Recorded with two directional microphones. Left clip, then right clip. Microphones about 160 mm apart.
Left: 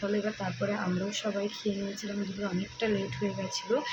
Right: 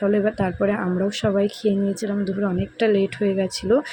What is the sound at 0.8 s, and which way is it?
Speech, 40° right (ahead or behind).